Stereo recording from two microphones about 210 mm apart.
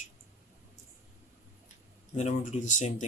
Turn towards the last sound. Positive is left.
turn(degrees=35)  # may be behind; listen again after turning